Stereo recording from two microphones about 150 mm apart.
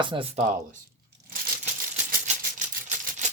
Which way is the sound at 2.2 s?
55° right (ahead or behind).